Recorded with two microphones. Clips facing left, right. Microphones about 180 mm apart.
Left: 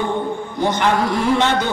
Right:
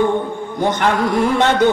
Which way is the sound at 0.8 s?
50° right (ahead or behind).